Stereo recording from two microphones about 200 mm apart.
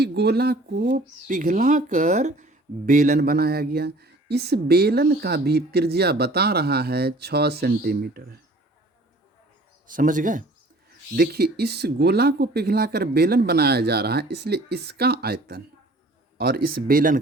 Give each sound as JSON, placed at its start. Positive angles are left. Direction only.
{"t": 0.0, "sound": "speech", "side_deg": -55}
{"t": 1.3, "sound": "speech", "side_deg": -40}
{"t": 9.8, "sound": "speech", "side_deg": -40}
{"t": 11.1, "sound": "speech", "side_deg": -50}